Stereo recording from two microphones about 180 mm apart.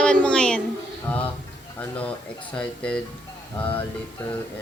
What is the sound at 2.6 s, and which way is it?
Speech, 5° left (ahead or behind).